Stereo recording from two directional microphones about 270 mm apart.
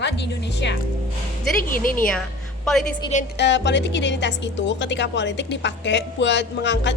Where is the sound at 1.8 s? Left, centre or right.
Left.